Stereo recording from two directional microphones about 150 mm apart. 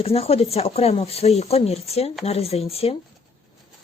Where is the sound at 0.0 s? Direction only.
40° left (ahead or behind).